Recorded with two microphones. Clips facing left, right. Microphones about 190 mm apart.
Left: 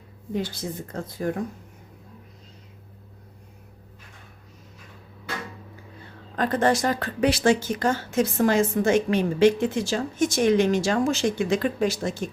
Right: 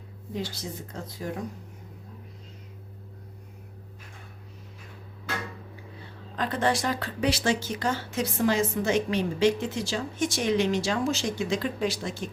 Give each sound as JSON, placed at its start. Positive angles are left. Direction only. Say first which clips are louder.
{"t": 0.3, "sound": "a woman's voice", "louder": "left 5 dB", "side_deg": 55}
{"t": 6.3, "sound": "a woman's voice", "louder": "left 5 dB", "side_deg": 50}